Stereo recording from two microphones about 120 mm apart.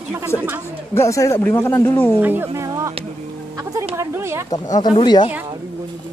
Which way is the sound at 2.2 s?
20° right (ahead or behind).